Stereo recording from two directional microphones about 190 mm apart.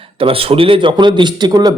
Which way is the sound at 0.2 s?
30° right (ahead or behind).